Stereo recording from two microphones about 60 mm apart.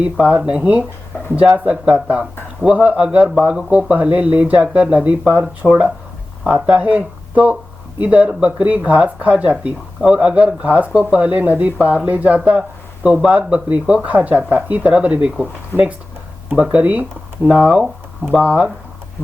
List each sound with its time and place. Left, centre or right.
0.0 s speech: right
16.6 s speech: right